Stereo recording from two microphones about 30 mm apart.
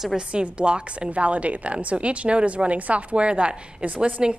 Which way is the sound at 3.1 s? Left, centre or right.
Right.